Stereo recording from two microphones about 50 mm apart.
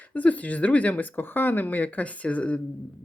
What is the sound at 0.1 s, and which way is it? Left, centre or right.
Speech, left.